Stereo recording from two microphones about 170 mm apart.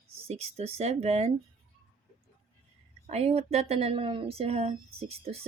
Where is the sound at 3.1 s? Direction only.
35° right (ahead or behind).